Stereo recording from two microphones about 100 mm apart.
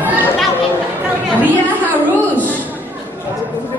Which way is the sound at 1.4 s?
15° right (ahead or behind).